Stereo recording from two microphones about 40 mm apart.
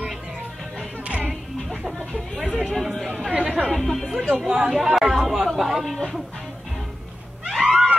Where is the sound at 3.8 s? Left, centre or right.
Centre.